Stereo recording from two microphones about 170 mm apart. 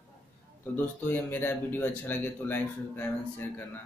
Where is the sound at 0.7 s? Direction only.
10° left (ahead or behind).